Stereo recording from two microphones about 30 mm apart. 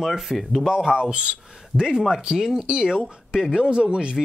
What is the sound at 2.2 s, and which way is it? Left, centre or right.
Speech, right.